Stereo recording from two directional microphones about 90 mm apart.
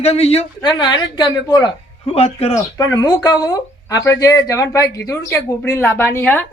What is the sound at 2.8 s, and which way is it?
Speech, 45° left (ahead or behind).